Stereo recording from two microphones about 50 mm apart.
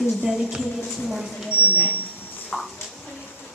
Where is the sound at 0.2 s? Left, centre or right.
Centre.